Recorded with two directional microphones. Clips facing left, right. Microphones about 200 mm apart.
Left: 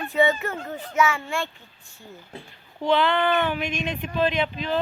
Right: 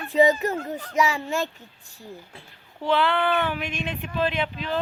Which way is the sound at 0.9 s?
35° right (ahead or behind).